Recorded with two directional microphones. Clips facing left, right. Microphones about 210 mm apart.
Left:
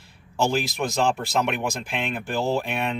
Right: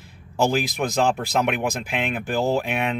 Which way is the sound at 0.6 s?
55° right (ahead or behind).